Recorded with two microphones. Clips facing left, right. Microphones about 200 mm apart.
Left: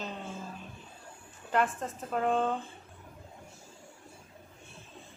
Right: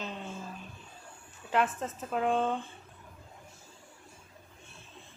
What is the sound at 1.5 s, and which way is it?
A woman's voice, 5° right (ahead or behind).